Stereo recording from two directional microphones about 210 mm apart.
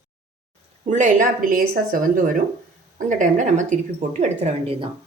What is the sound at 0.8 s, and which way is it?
A woman's voice, 35° right (ahead or behind).